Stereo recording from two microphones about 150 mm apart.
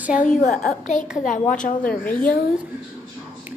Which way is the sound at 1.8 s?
10° left (ahead or behind).